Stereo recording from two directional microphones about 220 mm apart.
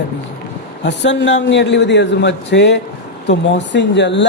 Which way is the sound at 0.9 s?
55° left (ahead or behind).